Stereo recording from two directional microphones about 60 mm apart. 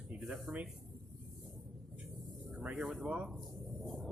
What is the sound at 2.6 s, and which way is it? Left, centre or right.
Speech, right.